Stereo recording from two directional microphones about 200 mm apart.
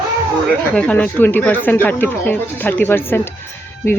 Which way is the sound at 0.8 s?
5° left (ahead or behind).